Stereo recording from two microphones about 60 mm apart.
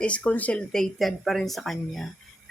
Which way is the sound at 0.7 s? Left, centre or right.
Centre.